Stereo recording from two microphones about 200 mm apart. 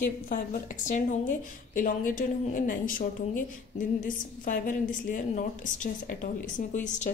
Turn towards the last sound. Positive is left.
turn(degrees=40)  # may be behind; listen again after turning